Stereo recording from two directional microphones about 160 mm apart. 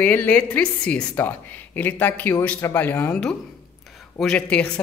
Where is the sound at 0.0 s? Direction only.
10° left (ahead or behind).